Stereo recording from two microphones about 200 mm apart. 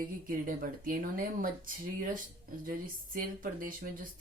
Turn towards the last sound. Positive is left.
turn(degrees=-45)  # may be behind; listen again after turning